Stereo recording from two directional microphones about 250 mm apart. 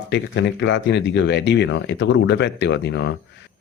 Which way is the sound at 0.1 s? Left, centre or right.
Left.